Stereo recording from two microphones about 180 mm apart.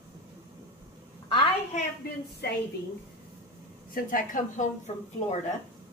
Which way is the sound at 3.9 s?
50° left (ahead or behind).